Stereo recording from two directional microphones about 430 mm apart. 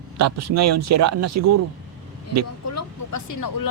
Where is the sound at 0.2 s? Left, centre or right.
Right.